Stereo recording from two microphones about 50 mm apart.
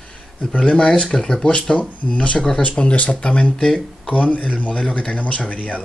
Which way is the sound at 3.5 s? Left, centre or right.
Centre.